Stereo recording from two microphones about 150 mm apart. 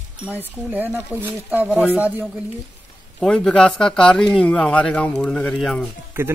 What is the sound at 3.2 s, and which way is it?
Speech, 5° left (ahead or behind).